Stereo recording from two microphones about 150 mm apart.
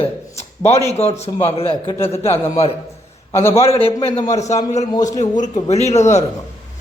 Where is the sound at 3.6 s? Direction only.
40° left (ahead or behind).